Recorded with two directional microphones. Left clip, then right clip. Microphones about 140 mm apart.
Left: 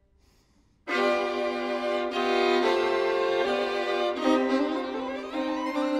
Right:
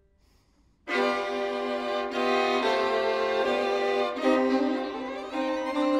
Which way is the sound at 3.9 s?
15° left (ahead or behind).